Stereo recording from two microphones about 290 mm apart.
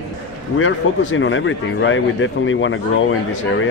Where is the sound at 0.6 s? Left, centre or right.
Left.